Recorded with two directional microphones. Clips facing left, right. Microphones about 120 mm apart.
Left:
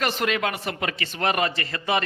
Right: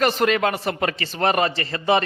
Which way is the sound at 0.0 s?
40° right (ahead or behind).